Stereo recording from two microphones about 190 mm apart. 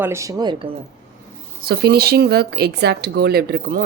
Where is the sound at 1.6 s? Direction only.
55° right (ahead or behind).